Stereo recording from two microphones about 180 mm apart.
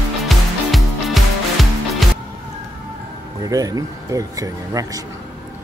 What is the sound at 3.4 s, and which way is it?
Speech, 20° right (ahead or behind).